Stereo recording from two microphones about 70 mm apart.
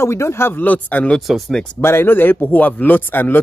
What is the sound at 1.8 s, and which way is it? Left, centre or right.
A man's voice, left.